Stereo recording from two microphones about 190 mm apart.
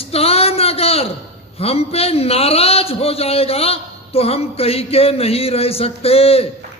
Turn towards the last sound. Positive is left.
turn(degrees=30)  # may be behind; listen again after turning